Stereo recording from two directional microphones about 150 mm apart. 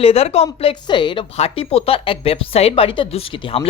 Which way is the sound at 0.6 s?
35° left (ahead or behind).